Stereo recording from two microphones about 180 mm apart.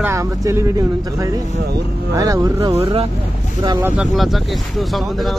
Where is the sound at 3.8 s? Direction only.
5° right (ahead or behind).